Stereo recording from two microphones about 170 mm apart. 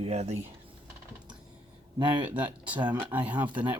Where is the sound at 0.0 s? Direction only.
40° right (ahead or behind).